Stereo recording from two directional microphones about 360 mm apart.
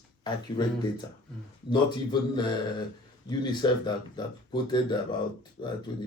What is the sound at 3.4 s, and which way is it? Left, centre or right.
Speech, centre.